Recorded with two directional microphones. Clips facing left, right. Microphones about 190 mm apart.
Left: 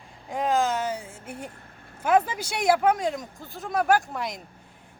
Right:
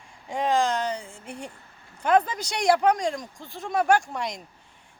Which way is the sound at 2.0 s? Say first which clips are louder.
Even; 5° left (ahead or behind).